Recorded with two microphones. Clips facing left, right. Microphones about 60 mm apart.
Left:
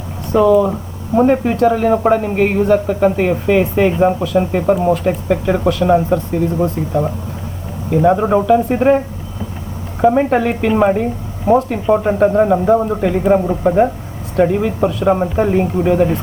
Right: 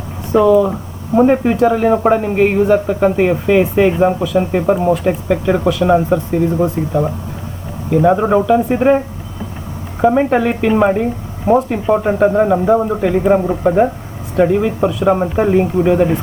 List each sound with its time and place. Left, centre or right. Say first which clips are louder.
0.5 s speech: right 1 dB; centre
7.9 s speech: right 1 dB; centre